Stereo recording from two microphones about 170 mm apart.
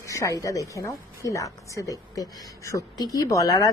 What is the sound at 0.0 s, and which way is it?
A woman's voice, 20° left (ahead or behind).